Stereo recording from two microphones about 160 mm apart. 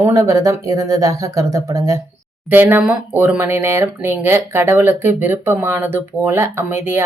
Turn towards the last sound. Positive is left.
turn(degrees=-15)  # may be behind; listen again after turning